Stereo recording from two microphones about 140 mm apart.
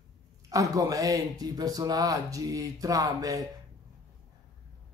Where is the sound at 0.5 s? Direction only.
25° right (ahead or behind).